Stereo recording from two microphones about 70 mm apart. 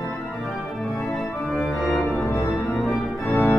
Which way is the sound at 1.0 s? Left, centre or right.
Centre.